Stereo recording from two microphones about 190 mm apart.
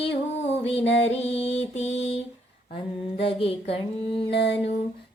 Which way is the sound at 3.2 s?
30° left (ahead or behind).